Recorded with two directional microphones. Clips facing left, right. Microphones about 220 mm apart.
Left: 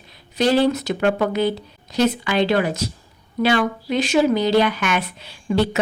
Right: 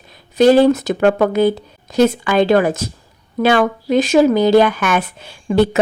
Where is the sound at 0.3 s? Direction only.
50° right (ahead or behind).